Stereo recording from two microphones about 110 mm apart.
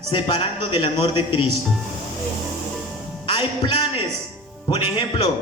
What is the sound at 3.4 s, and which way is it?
Music, 50° left (ahead or behind).